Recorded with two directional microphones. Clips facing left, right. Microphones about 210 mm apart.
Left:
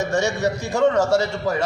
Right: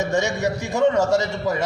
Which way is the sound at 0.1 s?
15° right (ahead or behind).